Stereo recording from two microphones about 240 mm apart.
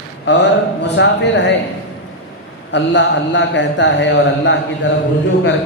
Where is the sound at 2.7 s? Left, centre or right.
Left.